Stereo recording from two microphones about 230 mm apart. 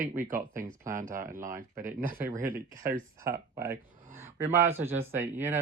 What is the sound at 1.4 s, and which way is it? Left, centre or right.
Speech, centre.